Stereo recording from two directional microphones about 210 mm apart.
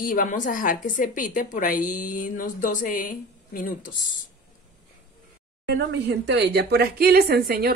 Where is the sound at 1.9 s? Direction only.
90° left.